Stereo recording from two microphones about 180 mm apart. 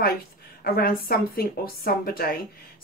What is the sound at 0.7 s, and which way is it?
A woman's voice, 55° left (ahead or behind).